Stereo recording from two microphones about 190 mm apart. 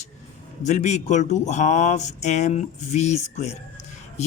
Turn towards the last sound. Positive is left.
turn(degrees=35)  # may be behind; listen again after turning